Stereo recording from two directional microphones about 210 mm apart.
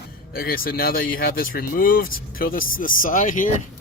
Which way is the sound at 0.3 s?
45° left (ahead or behind).